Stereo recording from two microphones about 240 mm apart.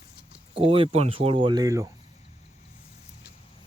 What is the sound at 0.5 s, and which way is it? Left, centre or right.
Speech, right.